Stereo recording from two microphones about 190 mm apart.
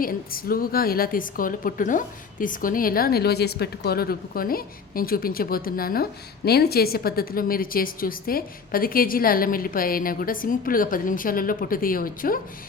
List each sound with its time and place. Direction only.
0.0 s a woman's voice: 50° left (ahead or behind)